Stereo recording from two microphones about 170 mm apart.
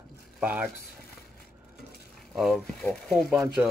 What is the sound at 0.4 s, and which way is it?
Speech, 10° right (ahead or behind).